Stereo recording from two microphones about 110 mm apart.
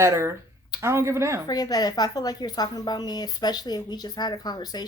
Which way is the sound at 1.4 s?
35° left (ahead or behind).